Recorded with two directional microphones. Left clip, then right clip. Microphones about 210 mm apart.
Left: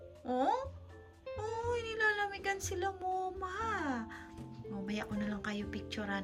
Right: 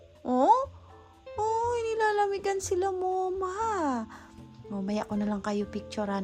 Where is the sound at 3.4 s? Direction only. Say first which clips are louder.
Right 8 dB; 20° right (ahead or behind).